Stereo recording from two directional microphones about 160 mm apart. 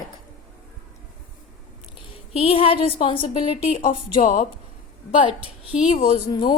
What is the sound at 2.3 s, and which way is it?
A woman's voice, 35° left (ahead or behind).